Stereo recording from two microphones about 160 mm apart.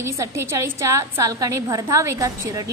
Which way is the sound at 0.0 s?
15° right (ahead or behind).